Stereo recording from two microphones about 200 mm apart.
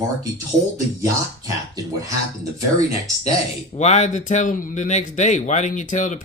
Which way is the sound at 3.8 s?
35° left (ahead or behind).